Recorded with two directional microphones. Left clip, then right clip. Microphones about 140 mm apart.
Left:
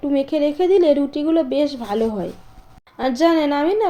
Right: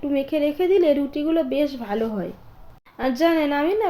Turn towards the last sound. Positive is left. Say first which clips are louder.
# left 3 dB
turn(degrees=25)  # may be behind; listen again after turning